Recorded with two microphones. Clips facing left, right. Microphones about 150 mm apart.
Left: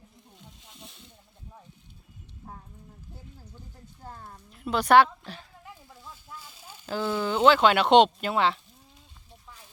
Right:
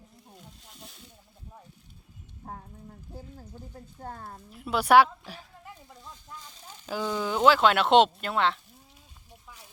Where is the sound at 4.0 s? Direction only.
55° right (ahead or behind).